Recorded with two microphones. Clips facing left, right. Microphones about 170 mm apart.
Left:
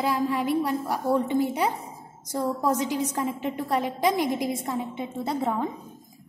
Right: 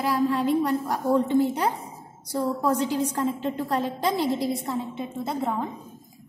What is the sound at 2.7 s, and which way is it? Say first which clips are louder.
A woman's voice: right 2 dB; 10° left (ahead or behind).